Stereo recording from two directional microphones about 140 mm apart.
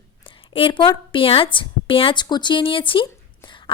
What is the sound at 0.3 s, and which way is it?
A woman's voice, 40° left (ahead or behind).